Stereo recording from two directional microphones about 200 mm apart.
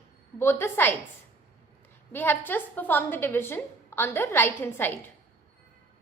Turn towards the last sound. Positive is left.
turn(degrees=10)  # may be behind; listen again after turning